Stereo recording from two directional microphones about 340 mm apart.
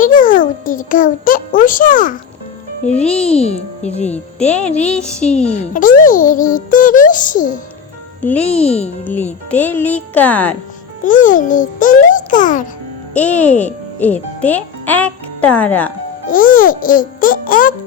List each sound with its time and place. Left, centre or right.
0.0 s a child's voice: left
2.8 s speech: centre
3.3 s a child's voice: centre
4.4 s speech: centre
5.5 s a child's voice: left
8.2 s speech: centre
11.0 s a child's voice: left
13.1 s a child's voice: centre
16.3 s a child's voice: left